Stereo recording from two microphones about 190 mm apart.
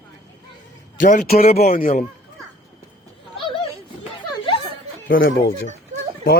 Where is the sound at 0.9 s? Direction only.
40° left (ahead or behind).